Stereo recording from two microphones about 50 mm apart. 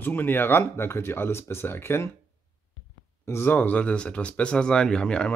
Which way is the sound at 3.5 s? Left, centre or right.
Left.